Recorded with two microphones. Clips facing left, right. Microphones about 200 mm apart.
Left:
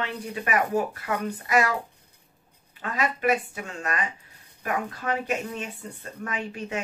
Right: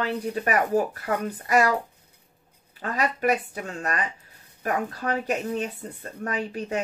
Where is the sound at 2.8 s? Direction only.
40° right (ahead or behind).